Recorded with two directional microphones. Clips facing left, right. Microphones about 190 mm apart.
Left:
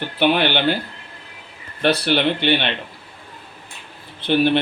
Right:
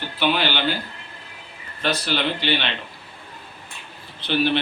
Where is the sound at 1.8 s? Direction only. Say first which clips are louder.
Left 6 dB; 60° left (ahead or behind).